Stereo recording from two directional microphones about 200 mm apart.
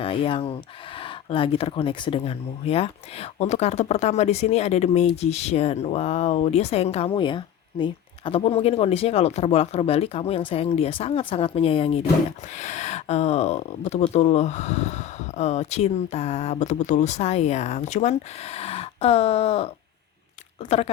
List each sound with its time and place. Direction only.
0.0 s speech: 25° left (ahead or behind)